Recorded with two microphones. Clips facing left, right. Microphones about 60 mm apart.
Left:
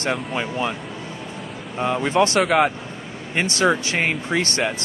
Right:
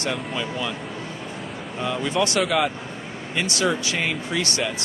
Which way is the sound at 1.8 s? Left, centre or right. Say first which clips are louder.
Left 5 dB; left.